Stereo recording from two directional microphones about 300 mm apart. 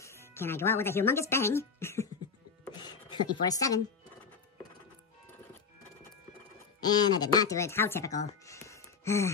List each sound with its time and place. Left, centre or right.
0.0 s speech: centre
2.6 s a sound: centre
6.8 s speech: centre